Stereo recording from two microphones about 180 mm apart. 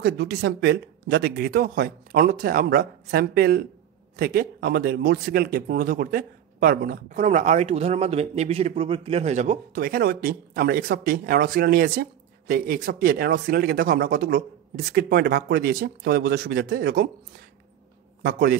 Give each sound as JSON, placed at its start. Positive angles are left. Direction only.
{"t": 0.0, "sound": "speech", "side_deg": -70}
{"t": 9.8, "sound": "speech", "side_deg": -55}
{"t": 18.2, "sound": "speech", "side_deg": -60}